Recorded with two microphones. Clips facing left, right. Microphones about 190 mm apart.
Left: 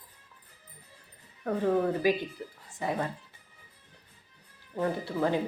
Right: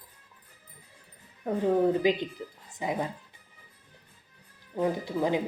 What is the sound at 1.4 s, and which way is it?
Speech, 15° right (ahead or behind).